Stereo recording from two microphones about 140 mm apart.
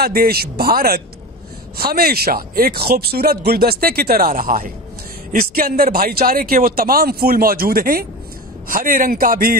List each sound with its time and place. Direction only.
0.0 s speech: 90° right